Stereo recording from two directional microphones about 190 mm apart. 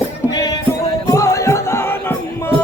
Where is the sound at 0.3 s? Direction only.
20° left (ahead or behind).